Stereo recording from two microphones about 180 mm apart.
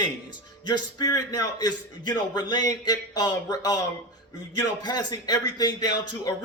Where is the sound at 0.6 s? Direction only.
25° left (ahead or behind).